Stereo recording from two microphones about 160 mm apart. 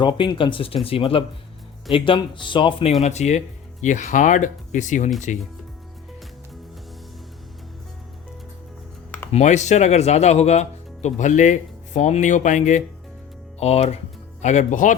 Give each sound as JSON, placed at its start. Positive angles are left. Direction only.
{"t": 0.0, "sound": "speech", "side_deg": 30}
{"t": 3.0, "sound": "speech", "side_deg": 45}
{"t": 9.3, "sound": "speech", "side_deg": 45}